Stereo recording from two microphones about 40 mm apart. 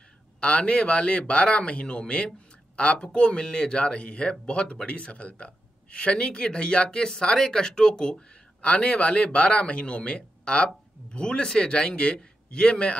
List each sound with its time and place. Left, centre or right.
0.4 s speech: left